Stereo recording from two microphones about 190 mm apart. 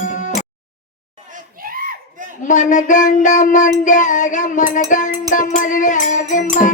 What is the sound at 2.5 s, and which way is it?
Child singing, 40° left (ahead or behind).